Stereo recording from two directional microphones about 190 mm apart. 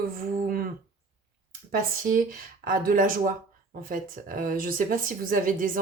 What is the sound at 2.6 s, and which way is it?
Speech, 50° right (ahead or behind).